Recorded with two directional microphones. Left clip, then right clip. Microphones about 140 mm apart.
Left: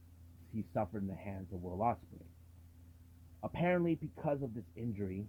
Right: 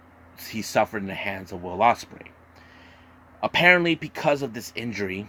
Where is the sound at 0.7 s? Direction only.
5° right (ahead or behind).